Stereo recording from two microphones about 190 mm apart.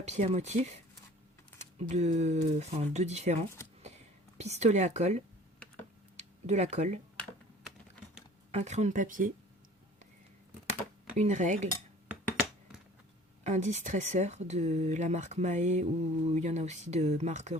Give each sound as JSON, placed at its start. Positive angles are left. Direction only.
{"t": 0.1, "sound": "speech", "side_deg": -35}
{"t": 1.8, "sound": "speech", "side_deg": -40}
{"t": 4.4, "sound": "speech", "side_deg": -35}
{"t": 8.5, "sound": "speech", "side_deg": -35}
{"t": 11.1, "sound": "speech", "side_deg": -40}
{"t": 13.4, "sound": "speech", "side_deg": -40}